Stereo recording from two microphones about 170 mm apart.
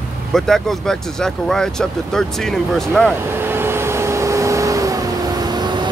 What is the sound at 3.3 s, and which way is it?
Vehicle, 15° right (ahead or behind).